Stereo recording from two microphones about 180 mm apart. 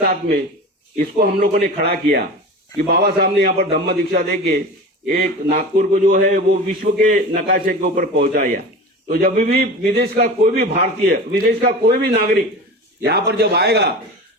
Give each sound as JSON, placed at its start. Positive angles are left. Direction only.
{"t": 0.0, "sound": "a man's voice", "side_deg": -55}